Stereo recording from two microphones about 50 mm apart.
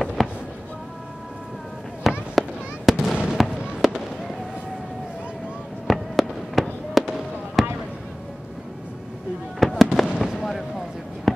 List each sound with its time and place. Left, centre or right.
0.0 s fireworks: centre
2.0 s fireworks: centre
3.4 s fireworks: centre
5.9 s fireworks: centre
9.6 s fireworks: centre
11.3 s a sound: centre